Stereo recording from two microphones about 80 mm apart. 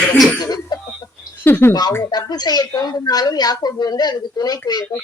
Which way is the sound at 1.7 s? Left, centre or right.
Left.